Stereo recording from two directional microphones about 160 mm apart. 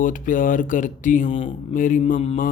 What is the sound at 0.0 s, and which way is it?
Speech, 55° left (ahead or behind).